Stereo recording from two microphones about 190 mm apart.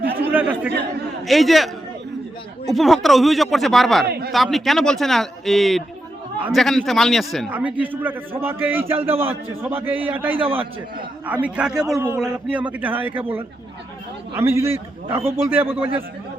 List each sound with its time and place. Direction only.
0.2 s a man's voice: 10° right (ahead or behind)
4.0 s a man's voice: 55° right (ahead or behind)
4.5 s a man's voice: centre (ahead or behind)
11.9 s a man's voice: 15° right (ahead or behind)